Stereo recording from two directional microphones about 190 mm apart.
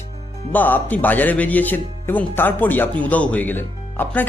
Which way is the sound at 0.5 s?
10° left (ahead or behind).